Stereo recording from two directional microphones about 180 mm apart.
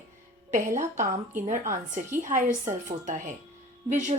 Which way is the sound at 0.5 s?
45° right (ahead or behind).